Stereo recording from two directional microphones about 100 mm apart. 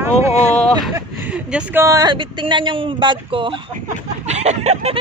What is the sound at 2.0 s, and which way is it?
Speech, 50° right (ahead or behind).